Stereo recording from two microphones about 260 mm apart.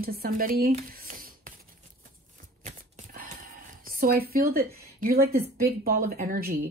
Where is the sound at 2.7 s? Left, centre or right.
Right.